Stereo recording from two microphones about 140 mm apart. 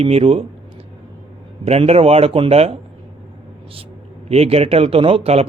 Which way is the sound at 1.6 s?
45° right (ahead or behind).